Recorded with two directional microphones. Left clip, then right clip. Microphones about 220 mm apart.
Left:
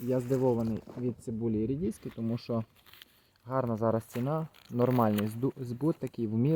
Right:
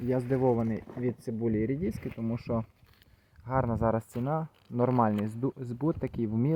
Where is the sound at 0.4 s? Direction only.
15° right (ahead or behind).